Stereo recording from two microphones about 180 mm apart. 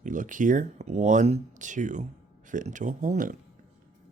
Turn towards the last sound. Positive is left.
turn(degrees=-45)  # may be behind; listen again after turning